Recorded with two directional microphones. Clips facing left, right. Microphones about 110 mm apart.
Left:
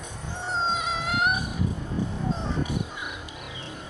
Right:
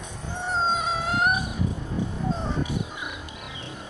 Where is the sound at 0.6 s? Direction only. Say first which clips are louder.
Right 2 dB; 40° right (ahead or behind).